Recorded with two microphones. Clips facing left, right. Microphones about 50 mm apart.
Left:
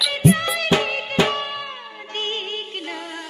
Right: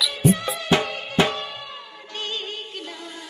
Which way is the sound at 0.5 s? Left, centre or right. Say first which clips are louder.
Left 2 dB; left.